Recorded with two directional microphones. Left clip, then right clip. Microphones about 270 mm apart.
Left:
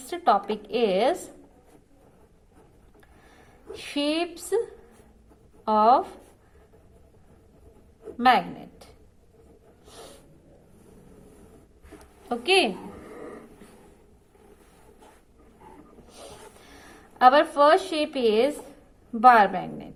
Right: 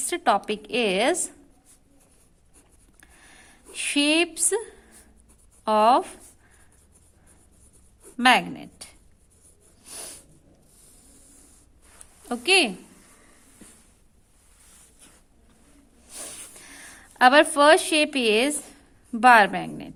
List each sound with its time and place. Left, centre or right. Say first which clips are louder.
0.1 s a woman's voice: even; right
3.7 s a woman's voice: right 5 dB; right
5.6 s a woman's voice: right 1 dB; right
8.2 s a woman's voice: right 1 dB; right
12.3 s a woman's voice: right 1 dB; right
16.0 s a sound: right 4 dB; right
17.2 s a woman's voice: right 1 dB; right